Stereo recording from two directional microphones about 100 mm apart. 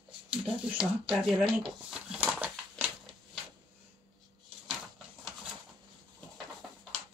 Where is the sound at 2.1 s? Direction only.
20° right (ahead or behind).